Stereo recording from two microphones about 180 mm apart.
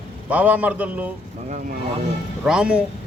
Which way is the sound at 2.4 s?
5° right (ahead or behind).